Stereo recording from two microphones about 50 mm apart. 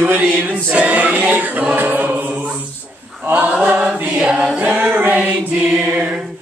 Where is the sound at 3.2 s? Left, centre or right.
Right.